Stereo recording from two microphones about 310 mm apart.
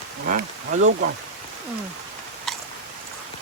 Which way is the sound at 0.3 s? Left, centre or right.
Right.